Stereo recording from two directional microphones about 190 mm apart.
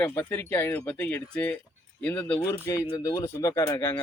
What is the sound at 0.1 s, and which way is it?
Speech, 10° left (ahead or behind).